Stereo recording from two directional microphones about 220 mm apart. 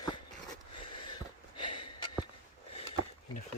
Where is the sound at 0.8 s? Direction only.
20° left (ahead or behind).